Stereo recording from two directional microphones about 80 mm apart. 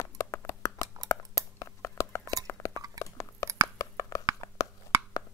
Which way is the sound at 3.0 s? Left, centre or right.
Left.